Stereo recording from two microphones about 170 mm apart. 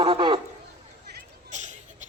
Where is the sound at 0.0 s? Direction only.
30° right (ahead or behind).